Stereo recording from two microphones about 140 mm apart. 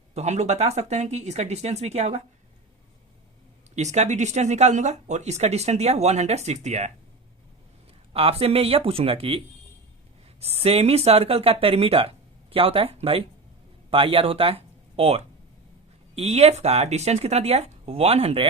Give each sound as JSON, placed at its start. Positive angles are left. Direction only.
{"t": 0.1, "sound": "speech", "side_deg": -50}
{"t": 3.8, "sound": "speech", "side_deg": -55}
{"t": 8.1, "sound": "speech", "side_deg": -45}
{"t": 10.4, "sound": "speech", "side_deg": -45}